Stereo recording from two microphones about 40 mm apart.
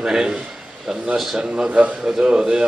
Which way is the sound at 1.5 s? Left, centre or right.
Right.